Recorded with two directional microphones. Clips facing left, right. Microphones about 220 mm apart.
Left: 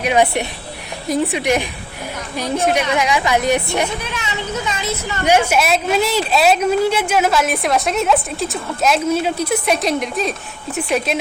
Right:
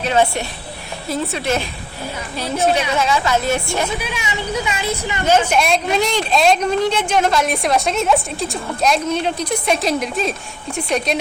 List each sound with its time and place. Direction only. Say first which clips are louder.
0.0 s a woman's voice: left 1 dB; 15° left (ahead or behind)
4.0 s speech: right 1 dB; 15° right (ahead or behind)
5.2 s speech: left 1 dB; 10° left (ahead or behind)